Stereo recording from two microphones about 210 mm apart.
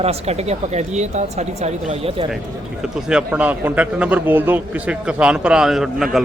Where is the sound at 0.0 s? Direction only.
30° right (ahead or behind).